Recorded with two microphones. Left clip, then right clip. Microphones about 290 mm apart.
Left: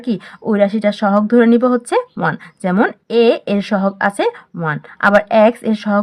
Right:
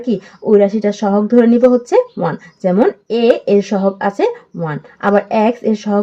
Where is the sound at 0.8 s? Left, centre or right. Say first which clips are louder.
Left 1 dB; left.